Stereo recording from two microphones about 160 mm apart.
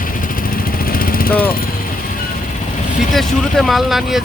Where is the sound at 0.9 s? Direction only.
65° left (ahead or behind).